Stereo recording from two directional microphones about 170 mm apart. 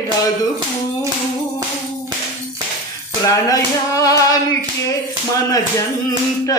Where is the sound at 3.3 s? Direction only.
20° left (ahead or behind).